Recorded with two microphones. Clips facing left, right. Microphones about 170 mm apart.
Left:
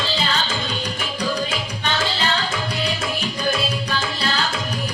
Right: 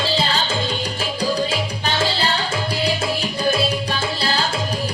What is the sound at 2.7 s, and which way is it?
Music, 30° right (ahead or behind).